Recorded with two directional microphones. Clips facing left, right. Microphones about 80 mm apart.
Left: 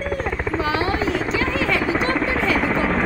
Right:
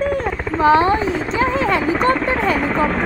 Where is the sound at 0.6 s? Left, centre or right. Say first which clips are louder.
Right 11 dB; right.